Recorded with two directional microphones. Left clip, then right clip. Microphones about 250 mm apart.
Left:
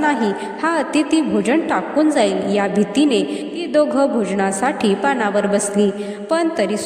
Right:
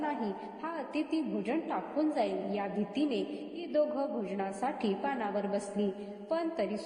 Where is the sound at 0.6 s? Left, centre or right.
Left.